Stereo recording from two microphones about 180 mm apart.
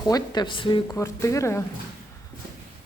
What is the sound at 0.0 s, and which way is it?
Speech, 25° left (ahead or behind).